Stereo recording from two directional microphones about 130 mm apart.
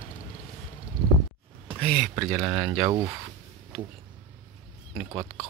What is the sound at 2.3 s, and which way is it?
Speech, 20° right (ahead or behind).